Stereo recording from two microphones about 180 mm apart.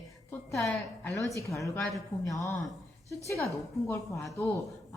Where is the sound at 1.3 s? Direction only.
15° left (ahead or behind).